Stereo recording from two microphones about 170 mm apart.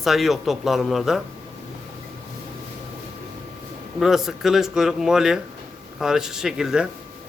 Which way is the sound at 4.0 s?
Centre (ahead or behind).